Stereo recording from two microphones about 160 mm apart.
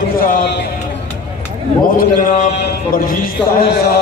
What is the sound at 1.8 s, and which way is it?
A man's voice, 65° left (ahead or behind).